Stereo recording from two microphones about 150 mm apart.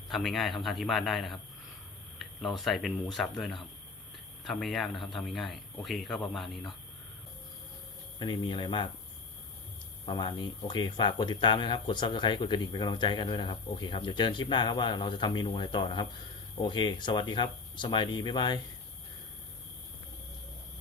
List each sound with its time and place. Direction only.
0.1 s speech: centre (ahead or behind)
8.2 s speech: 30° left (ahead or behind)
10.1 s speech: 30° left (ahead or behind)